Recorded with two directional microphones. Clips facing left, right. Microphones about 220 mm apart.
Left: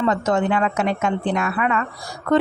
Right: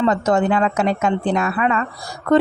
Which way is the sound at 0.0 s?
35° right (ahead or behind).